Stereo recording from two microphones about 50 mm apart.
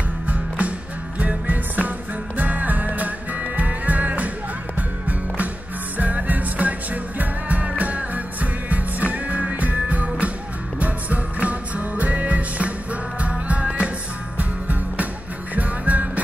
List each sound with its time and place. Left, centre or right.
0.3 s music: right